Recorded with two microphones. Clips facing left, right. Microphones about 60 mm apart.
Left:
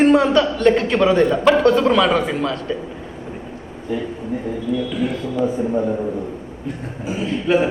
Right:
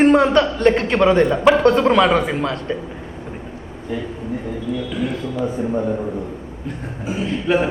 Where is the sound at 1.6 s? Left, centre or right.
Right.